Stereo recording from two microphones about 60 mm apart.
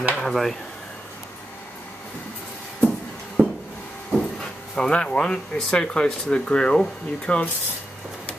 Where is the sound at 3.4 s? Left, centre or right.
Right.